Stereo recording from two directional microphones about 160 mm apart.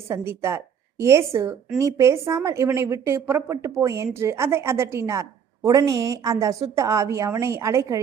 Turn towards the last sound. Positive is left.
turn(degrees=-20)  # may be behind; listen again after turning